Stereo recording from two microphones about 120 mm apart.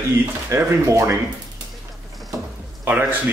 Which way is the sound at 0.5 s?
25° right (ahead or behind).